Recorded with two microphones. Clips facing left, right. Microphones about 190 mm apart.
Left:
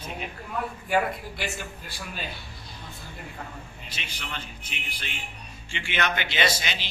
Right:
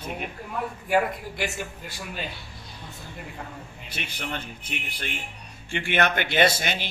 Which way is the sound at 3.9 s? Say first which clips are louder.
Right 6 dB; 55° right (ahead or behind).